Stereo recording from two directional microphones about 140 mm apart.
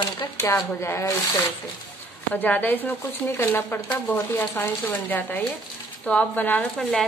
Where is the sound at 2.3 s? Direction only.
10° left (ahead or behind).